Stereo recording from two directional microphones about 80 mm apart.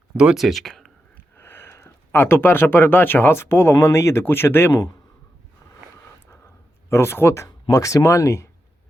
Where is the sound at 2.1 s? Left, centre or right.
Left.